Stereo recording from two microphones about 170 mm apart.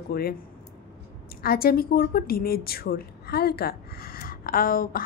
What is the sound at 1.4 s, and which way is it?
A woman's voice, 60° left (ahead or behind).